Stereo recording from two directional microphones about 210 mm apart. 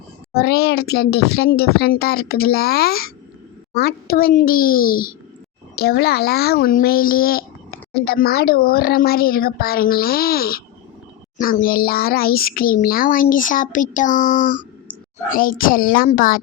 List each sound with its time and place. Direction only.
0.3 s a child's voice: 50° left (ahead or behind)